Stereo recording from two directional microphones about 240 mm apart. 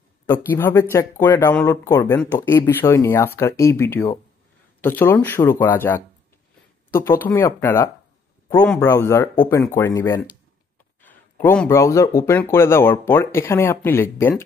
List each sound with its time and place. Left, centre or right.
0.3 s speech: centre
7.1 s speech: centre